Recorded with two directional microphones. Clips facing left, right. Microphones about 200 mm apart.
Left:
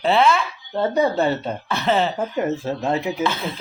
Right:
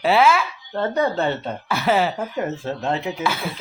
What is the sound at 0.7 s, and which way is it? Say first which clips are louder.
Speech: left 2 dB; 15° left (ahead or behind).